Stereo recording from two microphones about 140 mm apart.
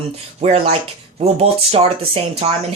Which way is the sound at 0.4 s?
45° right (ahead or behind).